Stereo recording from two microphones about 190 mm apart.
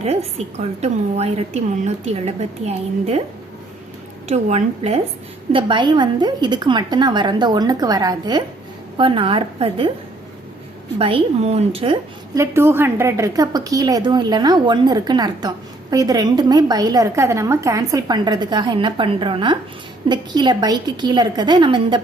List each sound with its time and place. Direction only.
0.0 s a woman's voice: 35° right (ahead or behind)
4.3 s a woman's voice: 35° right (ahead or behind)
10.9 s a woman's voice: 30° right (ahead or behind)